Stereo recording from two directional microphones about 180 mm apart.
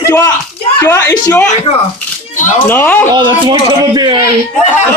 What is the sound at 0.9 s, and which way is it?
Speech, 20° left (ahead or behind).